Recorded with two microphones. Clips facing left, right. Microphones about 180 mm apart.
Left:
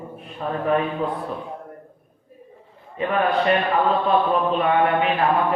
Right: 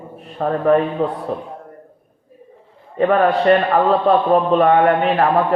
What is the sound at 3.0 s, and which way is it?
Speech, 65° right (ahead or behind).